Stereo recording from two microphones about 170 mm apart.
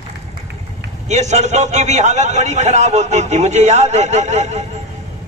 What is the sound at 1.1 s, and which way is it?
A man's voice, 40° right (ahead or behind).